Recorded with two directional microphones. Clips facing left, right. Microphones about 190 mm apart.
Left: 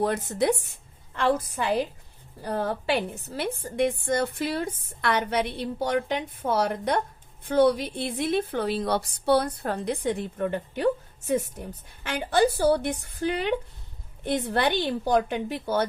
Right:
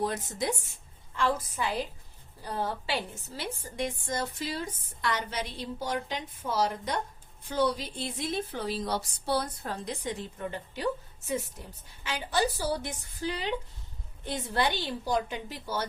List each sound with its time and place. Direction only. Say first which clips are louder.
0.0 s a woman's voice: left 7 dB; 60° left (ahead or behind)